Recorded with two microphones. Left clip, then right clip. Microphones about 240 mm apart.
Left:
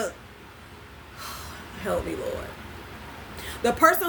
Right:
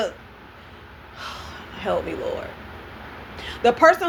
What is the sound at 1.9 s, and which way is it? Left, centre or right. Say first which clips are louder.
Speech: right 4 dB; left.